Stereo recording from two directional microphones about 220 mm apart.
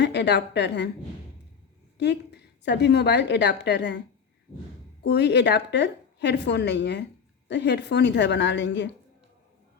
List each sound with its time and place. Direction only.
0.0 s a woman's voice: 50° left (ahead or behind)
2.0 s a woman's voice: 50° left (ahead or behind)
5.0 s a woman's voice: 50° left (ahead or behind)